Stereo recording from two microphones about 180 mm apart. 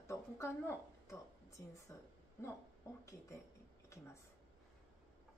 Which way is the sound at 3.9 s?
15° left (ahead or behind).